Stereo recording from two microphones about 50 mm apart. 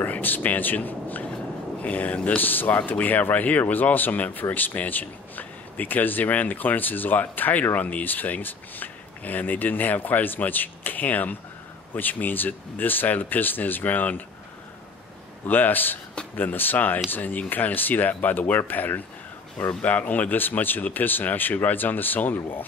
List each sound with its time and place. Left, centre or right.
0.0 s speech: left
15.4 s speech: left